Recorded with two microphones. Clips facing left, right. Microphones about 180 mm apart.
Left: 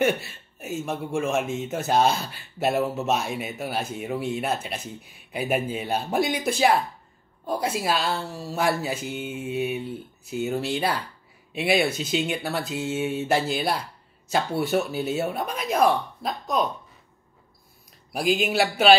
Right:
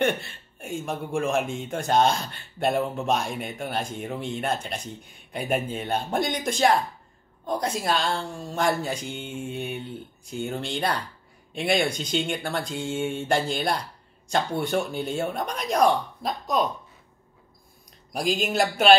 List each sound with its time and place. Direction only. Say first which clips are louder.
0.0 s speech: left 2 dB; 5° left (ahead or behind)
18.1 s speech: left 2 dB; 5° left (ahead or behind)